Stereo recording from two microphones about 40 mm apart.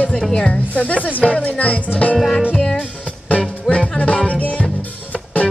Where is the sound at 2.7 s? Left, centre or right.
Left.